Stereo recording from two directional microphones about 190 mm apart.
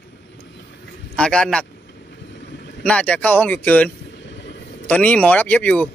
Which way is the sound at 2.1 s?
65° left (ahead or behind).